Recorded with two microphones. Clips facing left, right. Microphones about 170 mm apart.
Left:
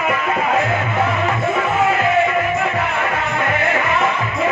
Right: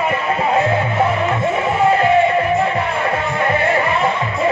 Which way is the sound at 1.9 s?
30° right (ahead or behind).